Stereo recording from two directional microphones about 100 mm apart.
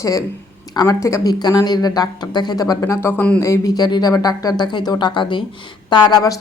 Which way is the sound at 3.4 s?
30° left (ahead or behind).